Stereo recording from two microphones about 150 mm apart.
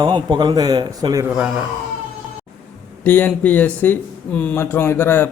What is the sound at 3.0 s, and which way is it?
Speech, 10° left (ahead or behind).